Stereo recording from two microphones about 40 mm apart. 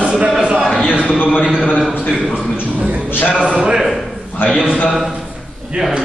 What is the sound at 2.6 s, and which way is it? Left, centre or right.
Speech, right.